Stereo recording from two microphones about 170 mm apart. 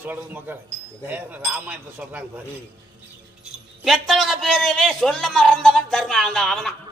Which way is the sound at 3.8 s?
Centre (ahead or behind).